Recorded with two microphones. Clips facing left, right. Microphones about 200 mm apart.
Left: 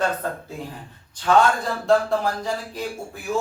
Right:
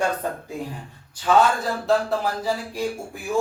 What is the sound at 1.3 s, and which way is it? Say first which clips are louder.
Speech: even; 5° right (ahead or behind).